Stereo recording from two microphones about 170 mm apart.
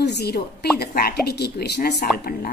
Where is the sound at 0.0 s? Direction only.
75° left (ahead or behind).